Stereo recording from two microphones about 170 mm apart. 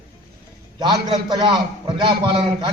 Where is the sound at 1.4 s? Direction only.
30° right (ahead or behind).